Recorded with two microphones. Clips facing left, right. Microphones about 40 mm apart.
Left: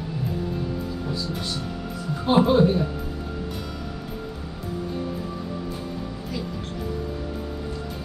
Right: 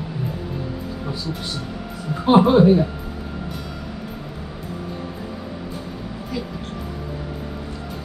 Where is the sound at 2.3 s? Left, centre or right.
Right.